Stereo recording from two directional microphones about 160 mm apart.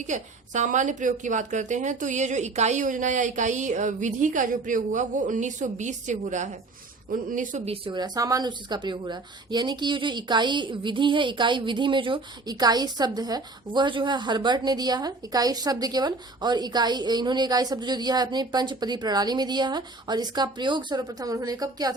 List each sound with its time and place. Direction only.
0.1 s a woman's voice: 50° right (ahead or behind)
7.9 s a woman's voice: 25° right (ahead or behind)